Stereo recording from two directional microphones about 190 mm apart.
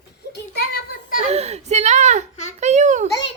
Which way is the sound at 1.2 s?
35° right (ahead or behind).